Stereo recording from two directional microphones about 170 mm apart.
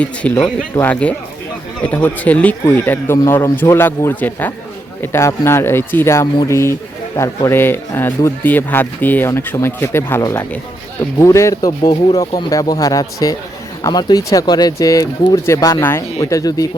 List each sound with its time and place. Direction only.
0.0 s speech: 5° left (ahead or behind)